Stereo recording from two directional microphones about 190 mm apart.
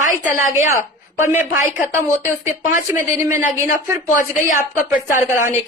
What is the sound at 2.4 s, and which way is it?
A man's voice, 40° left (ahead or behind).